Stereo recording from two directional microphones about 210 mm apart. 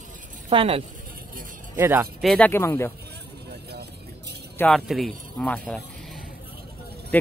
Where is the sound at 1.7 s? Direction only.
10° right (ahead or behind).